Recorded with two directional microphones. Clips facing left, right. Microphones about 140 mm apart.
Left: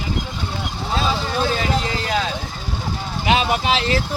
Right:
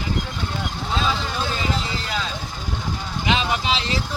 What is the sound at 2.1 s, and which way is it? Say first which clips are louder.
Vehicle: left 6 dB; 65° left (ahead or behind).